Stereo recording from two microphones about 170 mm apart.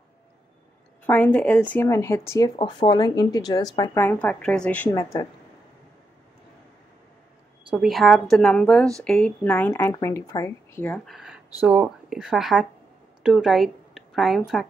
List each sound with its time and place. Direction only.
1.0 s speech: 10° left (ahead or behind)
5.1 s speech: 25° left (ahead or behind)
7.7 s a woman's voice: centre (ahead or behind)
11.1 s a woman's voice: centre (ahead or behind)